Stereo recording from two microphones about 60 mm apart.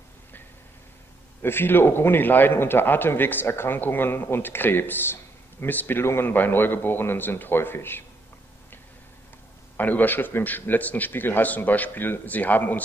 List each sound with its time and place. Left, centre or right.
1.4 s a man's voice: left
9.8 s a man's voice: left